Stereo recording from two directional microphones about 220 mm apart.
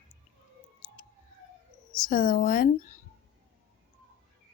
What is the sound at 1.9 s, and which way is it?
Speech, 40° left (ahead or behind).